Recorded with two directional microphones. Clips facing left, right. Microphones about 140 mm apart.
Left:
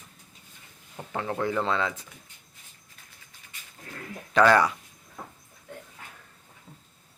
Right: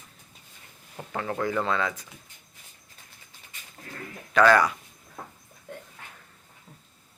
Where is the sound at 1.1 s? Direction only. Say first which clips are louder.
Even; 15° left (ahead or behind).